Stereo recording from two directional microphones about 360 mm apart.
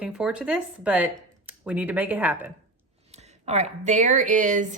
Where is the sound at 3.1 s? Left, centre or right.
Centre.